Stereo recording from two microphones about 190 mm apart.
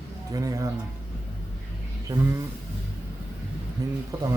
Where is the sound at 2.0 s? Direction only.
15° right (ahead or behind).